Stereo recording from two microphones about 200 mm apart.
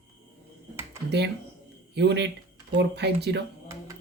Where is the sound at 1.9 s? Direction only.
60° right (ahead or behind).